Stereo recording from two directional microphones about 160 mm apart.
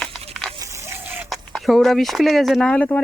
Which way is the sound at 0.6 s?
15° right (ahead or behind).